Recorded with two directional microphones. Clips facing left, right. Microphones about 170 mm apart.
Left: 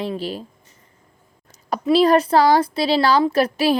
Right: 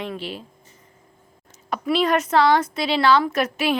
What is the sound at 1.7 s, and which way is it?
A woman's voice, 35° left (ahead or behind).